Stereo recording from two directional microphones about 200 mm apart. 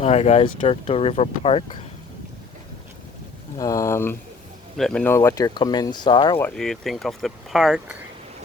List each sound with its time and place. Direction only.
0.0 s speech: 30° left (ahead or behind)
3.6 s speech: 15° left (ahead or behind)
6.3 s speech: 5° left (ahead or behind)